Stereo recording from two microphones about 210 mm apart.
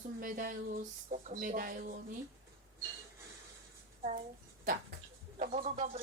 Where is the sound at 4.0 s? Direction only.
35° right (ahead or behind).